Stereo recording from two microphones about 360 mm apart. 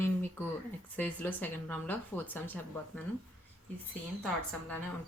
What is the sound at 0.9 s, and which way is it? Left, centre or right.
Speech, centre.